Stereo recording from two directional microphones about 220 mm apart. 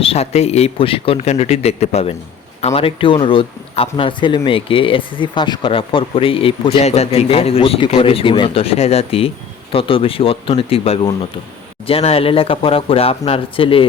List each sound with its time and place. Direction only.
0.0 s speech: 25° left (ahead or behind)